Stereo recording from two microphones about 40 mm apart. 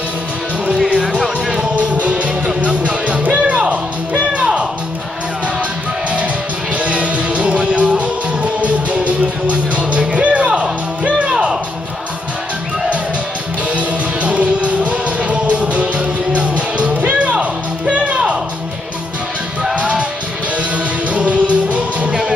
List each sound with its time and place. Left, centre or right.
1.5 s music: right
6.8 s music: right
13.7 s music: right
19.7 s music: right